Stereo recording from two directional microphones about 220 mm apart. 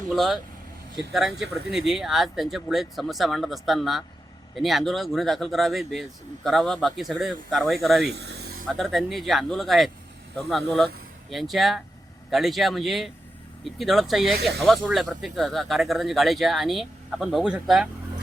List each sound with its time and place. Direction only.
0.1 s speech: centre (ahead or behind)
8.1 s a sound: 50° right (ahead or behind)
8.6 s speech: centre (ahead or behind)